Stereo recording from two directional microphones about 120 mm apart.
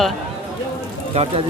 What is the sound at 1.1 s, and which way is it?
Speech, 55° right (ahead or behind).